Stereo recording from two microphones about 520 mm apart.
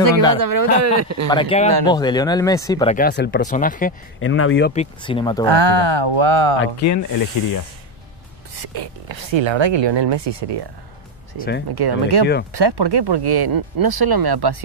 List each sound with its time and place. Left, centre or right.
0.3 s speech: right
1.3 s speech: centre
5.5 s speech: right
6.6 s speech: left
8.5 s speech: right
11.7 s speech: right